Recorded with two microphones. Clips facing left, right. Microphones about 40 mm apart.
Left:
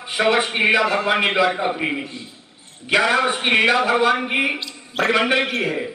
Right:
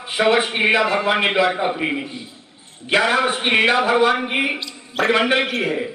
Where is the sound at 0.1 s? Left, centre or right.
Centre.